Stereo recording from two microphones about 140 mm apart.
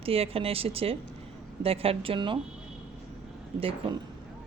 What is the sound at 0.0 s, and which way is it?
Speech, 45° right (ahead or behind).